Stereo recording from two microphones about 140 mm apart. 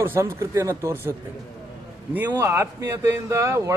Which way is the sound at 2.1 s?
15° right (ahead or behind).